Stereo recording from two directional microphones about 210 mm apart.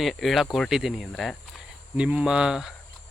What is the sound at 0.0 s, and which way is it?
Speech, centre (ahead or behind).